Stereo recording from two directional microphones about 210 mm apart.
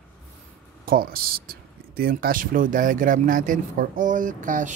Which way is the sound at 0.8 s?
45° right (ahead or behind).